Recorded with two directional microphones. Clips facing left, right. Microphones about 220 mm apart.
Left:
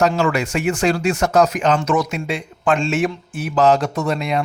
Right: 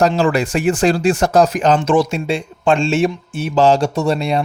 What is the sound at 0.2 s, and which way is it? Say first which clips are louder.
Speech: right 3 dB; 35° right (ahead or behind).